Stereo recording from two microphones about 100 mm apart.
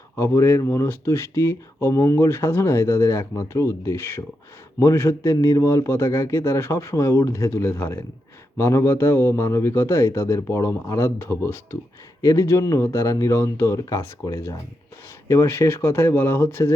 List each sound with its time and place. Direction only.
0.2 s speech: 30° left (ahead or behind)